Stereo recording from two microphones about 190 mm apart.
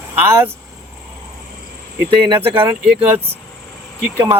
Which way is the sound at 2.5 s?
10° right (ahead or behind).